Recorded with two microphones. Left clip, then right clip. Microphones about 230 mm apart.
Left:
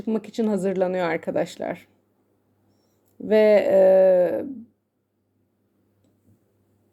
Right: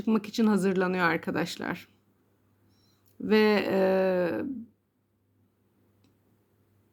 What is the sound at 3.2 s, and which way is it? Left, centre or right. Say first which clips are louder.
Speech: left 8 dB; centre.